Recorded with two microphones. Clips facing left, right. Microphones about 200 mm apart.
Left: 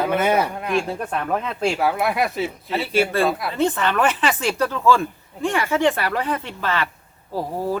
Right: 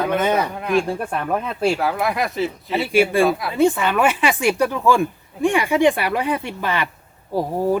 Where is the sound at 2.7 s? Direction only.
10° right (ahead or behind).